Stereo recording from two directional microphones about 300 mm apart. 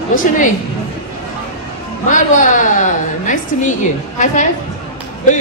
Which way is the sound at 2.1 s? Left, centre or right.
Left.